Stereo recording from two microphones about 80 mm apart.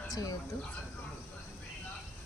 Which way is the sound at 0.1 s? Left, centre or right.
Left.